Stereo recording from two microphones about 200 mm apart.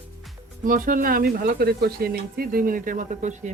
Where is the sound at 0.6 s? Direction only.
45° right (ahead or behind).